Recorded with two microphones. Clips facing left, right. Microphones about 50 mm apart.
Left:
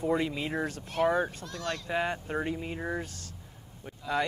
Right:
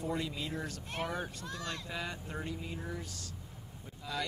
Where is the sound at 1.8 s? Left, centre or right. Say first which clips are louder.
Left 9 dB; left.